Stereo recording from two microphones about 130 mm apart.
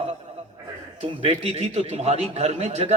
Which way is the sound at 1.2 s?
55° right (ahead or behind).